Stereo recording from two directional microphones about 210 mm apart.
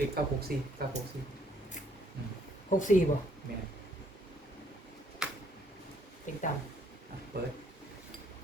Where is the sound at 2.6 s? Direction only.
35° left (ahead or behind).